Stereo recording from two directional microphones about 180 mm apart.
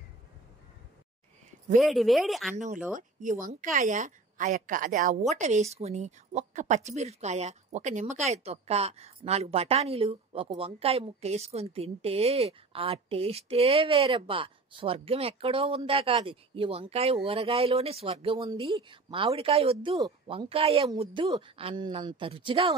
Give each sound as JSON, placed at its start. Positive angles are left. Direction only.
{"t": 1.8, "sound": "speech", "side_deg": 0}
{"t": 2.5, "sound": "a woman's voice", "side_deg": -40}